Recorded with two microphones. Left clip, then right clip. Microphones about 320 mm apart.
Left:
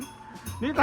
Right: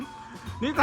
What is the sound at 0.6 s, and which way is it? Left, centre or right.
Speech, centre.